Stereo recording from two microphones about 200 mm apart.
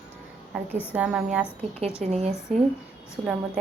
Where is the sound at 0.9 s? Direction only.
5° right (ahead or behind).